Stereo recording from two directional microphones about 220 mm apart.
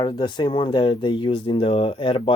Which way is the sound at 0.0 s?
20° left (ahead or behind).